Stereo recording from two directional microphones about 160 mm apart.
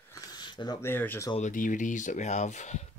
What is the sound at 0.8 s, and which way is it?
Speech, 10° left (ahead or behind).